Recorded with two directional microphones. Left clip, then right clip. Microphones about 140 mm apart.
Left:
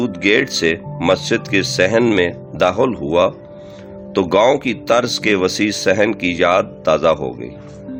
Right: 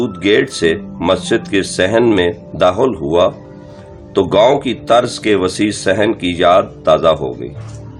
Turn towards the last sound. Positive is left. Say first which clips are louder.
# right 3 dB
turn(degrees=45)  # may be behind; listen again after turning